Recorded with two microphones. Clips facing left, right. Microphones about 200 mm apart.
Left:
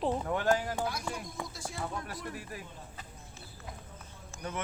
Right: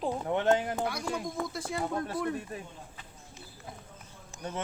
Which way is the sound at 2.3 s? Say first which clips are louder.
Right 6 dB; 25° right (ahead or behind).